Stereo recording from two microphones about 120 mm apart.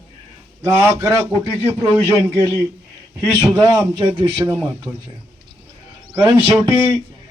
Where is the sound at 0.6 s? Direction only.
20° right (ahead or behind).